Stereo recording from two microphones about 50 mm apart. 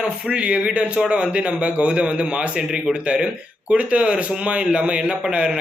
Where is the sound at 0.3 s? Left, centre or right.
Right.